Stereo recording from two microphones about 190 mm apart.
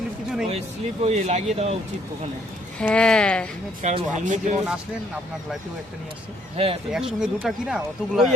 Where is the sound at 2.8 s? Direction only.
5° left (ahead or behind).